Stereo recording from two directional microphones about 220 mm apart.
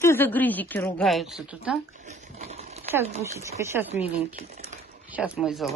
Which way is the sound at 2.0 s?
30° right (ahead or behind).